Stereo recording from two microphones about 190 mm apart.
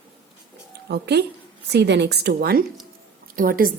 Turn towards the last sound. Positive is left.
turn(degrees=-50)  # may be behind; listen again after turning